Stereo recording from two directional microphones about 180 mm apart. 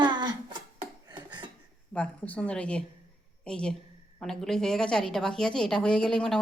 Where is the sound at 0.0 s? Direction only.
25° right (ahead or behind).